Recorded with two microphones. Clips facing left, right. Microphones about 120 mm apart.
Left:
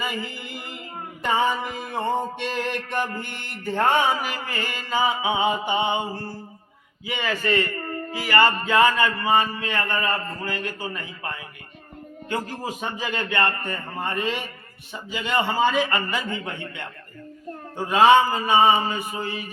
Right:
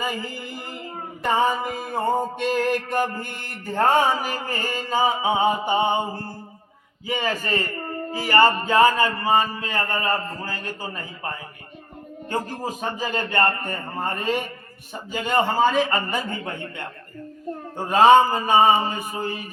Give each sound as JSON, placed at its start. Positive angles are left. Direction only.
{"t": 0.0, "sound": "music", "side_deg": -40}
{"t": 7.1, "sound": "music", "side_deg": -40}